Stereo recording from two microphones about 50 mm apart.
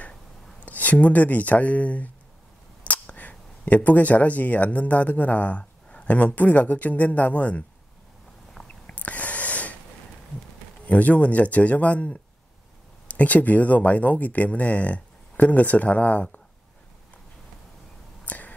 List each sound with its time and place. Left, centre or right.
0.6 s speech: left
8.6 s snort: left
10.9 s speech: left
18.2 s whispering: left